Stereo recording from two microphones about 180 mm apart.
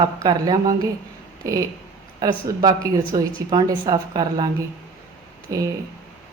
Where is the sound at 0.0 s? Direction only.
20° right (ahead or behind).